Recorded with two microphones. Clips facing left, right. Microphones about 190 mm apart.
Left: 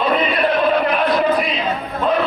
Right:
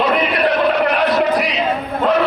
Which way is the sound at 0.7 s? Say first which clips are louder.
Right 1 dB; 75° right (ahead or behind).